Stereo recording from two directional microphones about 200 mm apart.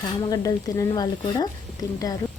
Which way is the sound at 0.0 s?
15° left (ahead or behind).